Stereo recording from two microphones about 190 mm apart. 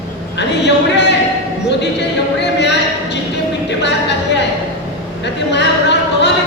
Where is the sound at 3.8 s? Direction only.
65° left (ahead or behind).